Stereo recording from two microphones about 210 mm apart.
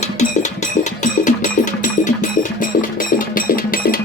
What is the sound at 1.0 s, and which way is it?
Music, 35° left (ahead or behind).